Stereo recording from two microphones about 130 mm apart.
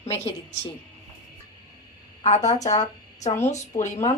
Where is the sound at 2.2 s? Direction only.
60° left (ahead or behind).